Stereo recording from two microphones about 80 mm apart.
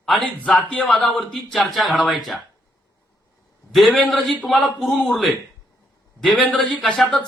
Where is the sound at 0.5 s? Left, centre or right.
Centre.